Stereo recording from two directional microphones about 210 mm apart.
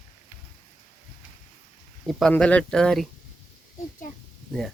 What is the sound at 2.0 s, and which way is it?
Speech, centre (ahead or behind).